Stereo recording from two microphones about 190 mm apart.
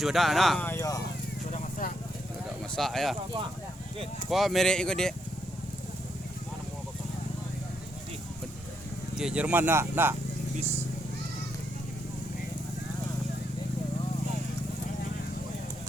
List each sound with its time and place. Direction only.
0.0 s speech: centre (ahead or behind)
0.7 s speech: 15° left (ahead or behind)
1.5 s vehicle: 40° left (ahead or behind)
2.7 s speech: centre (ahead or behind)
4.3 s speech: centre (ahead or behind)
9.1 s speech: 5° right (ahead or behind)